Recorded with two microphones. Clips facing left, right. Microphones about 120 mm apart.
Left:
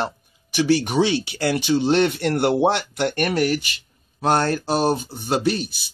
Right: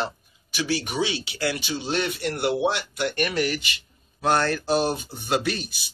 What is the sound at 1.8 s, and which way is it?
Speech, 55° left (ahead or behind).